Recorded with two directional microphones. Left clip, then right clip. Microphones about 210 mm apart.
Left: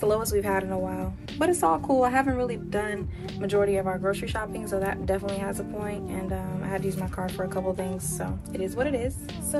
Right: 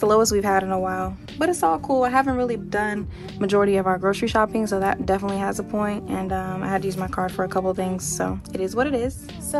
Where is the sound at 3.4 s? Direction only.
30° right (ahead or behind).